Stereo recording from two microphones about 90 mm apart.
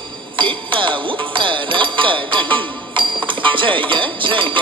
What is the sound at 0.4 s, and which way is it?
Music, 65° right (ahead or behind).